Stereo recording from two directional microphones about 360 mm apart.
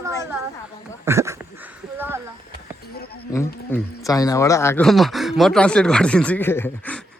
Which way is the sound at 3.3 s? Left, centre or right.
Centre.